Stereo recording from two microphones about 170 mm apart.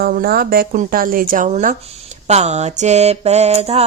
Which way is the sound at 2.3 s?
40° right (ahead or behind).